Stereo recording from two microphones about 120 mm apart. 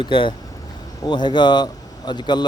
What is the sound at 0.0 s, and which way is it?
Speech, 45° left (ahead or behind).